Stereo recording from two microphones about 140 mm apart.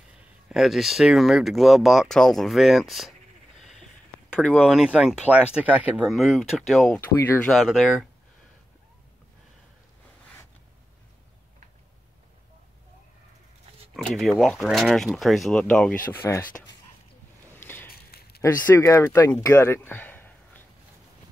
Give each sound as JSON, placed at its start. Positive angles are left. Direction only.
{"t": 0.1, "sound": "speech", "side_deg": -5}
{"t": 4.3, "sound": "speech", "side_deg": 10}
{"t": 4.6, "sound": "speech", "side_deg": -5}
{"t": 7.0, "sound": "speech", "side_deg": 15}
{"t": 7.4, "sound": "speech", "side_deg": 0}
{"t": 13.9, "sound": "speech", "side_deg": 0}
{"t": 17.6, "sound": "a sound", "side_deg": 15}
{"t": 17.8, "sound": "a sound", "side_deg": 90}
{"t": 18.4, "sound": "speech", "side_deg": 20}
{"t": 19.4, "sound": "a sound", "side_deg": 20}